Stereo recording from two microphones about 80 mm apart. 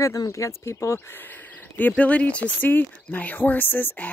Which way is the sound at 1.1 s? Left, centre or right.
Left.